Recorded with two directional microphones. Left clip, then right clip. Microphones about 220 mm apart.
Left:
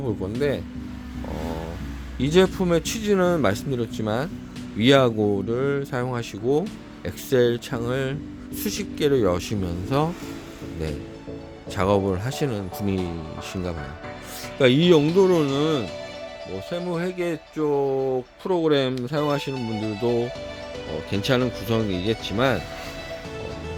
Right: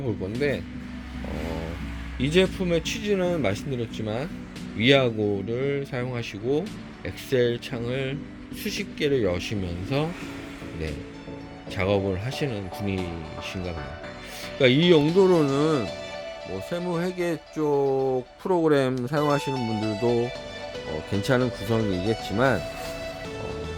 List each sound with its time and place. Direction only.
2.1 s speech: 15° left (ahead or behind)
11.8 s speech: 20° left (ahead or behind)
14.6 s speech: 15° left (ahead or behind)
15.0 s speech: centre (ahead or behind)
21.2 s speech: 5° left (ahead or behind)